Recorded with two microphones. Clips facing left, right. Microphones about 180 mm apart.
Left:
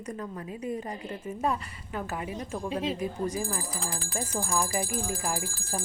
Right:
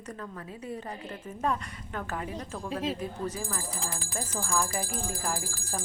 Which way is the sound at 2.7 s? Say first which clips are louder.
Even; centre (ahead or behind).